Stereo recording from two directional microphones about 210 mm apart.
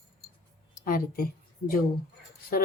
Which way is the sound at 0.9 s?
45° left (ahead or behind).